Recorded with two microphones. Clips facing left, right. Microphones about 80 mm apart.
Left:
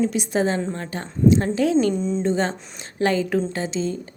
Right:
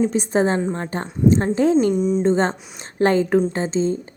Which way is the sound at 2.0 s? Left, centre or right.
Centre.